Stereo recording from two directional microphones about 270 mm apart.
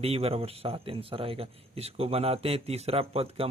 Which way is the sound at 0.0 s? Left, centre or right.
Right.